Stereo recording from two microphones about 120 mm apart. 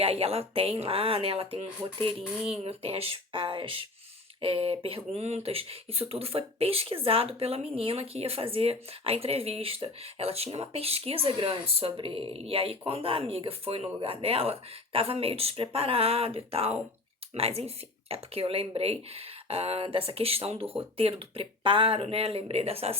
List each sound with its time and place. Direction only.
0.0 s speech: 55° right (ahead or behind)